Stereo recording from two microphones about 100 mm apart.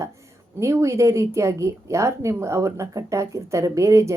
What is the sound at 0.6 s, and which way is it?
Speech, 30° right (ahead or behind).